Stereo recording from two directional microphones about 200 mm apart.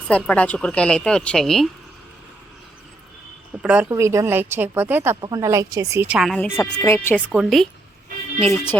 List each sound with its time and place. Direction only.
0.1 s speech: 5° left (ahead or behind)
3.6 s speech: 5° right (ahead or behind)
6.6 s speech: 15° left (ahead or behind)